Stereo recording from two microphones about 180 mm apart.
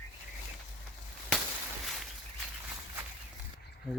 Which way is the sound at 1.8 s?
Centre (ahead or behind).